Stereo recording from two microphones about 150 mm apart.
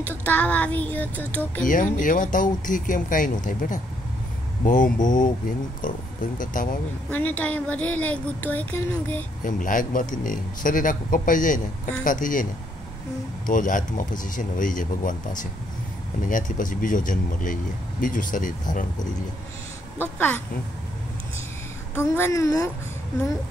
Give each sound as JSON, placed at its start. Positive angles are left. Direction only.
{"t": 0.0, "sound": "a woman's voice", "side_deg": 10}
{"t": 1.6, "sound": "a man's voice", "side_deg": 65}
{"t": 4.9, "sound": "a man's voice", "side_deg": 60}
{"t": 7.1, "sound": "a woman's voice", "side_deg": 10}
{"t": 9.4, "sound": "a man's voice", "side_deg": 60}
{"t": 13.5, "sound": "a man's voice", "side_deg": 60}
{"t": 20.0, "sound": "a woman's voice", "side_deg": 10}
{"t": 21.9, "sound": "a woman's voice", "side_deg": 15}